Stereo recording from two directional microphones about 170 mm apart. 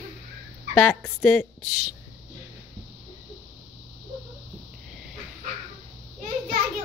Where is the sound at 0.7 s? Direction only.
10° left (ahead or behind).